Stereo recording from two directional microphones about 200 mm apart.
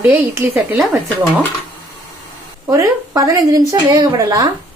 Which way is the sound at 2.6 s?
15° right (ahead or behind).